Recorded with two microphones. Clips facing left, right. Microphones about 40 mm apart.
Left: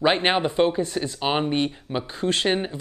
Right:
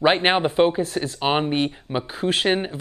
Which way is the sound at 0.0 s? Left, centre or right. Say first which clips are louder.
Right 2 dB; centre.